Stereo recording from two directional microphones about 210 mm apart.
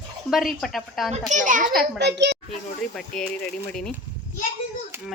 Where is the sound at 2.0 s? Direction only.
55° right (ahead or behind).